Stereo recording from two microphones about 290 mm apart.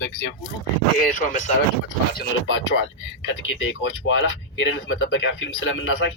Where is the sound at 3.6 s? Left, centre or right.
Left.